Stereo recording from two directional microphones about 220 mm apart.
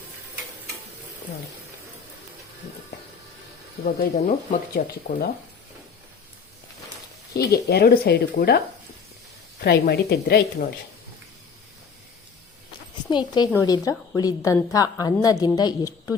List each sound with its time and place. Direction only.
3.8 s speech: 40° left (ahead or behind)
7.3 s speech: 45° left (ahead or behind)
13.1 s a woman's voice: 20° left (ahead or behind)